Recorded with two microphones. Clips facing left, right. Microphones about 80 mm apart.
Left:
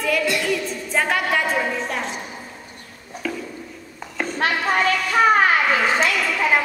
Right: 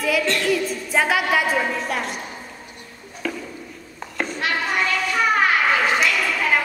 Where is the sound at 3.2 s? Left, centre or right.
Centre.